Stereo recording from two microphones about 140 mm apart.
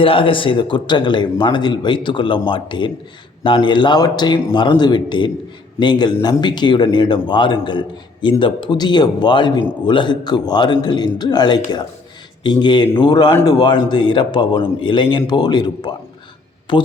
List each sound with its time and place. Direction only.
0.0 s a man's voice: 40° left (ahead or behind)